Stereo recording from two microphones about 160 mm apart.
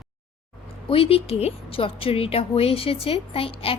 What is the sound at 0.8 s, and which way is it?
A woman's voice, 35° left (ahead or behind).